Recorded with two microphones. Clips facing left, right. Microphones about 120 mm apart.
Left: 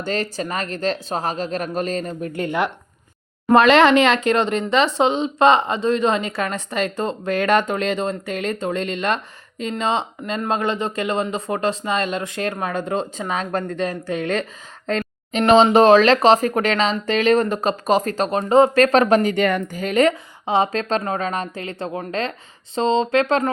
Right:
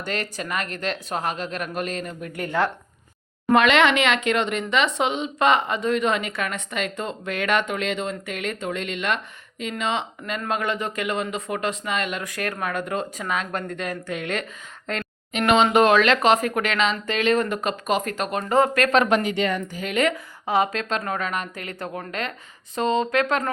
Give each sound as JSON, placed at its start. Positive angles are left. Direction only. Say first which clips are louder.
{"t": 0.0, "sound": "speech", "louder": "left 5 dB", "side_deg": 30}
{"t": 3.5, "sound": "speech", "louder": "left 5 dB", "side_deg": 35}
{"t": 19.8, "sound": "speech", "louder": "left 6 dB", "side_deg": 35}
{"t": 20.4, "sound": "speech", "louder": "left 3 dB", "side_deg": 25}